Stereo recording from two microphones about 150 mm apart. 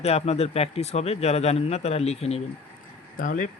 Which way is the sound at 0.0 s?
45° left (ahead or behind).